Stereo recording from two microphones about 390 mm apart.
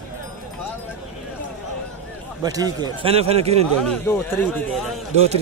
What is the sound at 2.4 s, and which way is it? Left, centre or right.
A man's voice, centre.